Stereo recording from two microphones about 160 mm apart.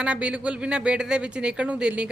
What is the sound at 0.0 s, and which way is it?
Speech, 5° right (ahead or behind).